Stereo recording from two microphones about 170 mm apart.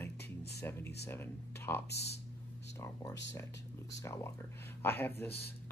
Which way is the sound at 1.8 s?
75° left (ahead or behind).